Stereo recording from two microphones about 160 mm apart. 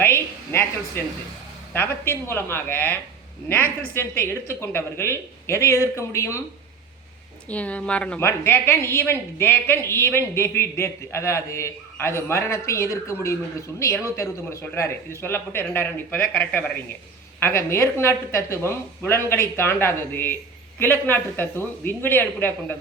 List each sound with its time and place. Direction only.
0.0 s a sound: 15° left (ahead or behind)
1.7 s a woman's voice: 15° left (ahead or behind)
7.4 s a woman's voice: 10° left (ahead or behind)